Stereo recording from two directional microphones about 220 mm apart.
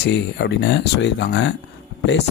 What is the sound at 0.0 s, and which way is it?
Speech, 50° left (ahead or behind).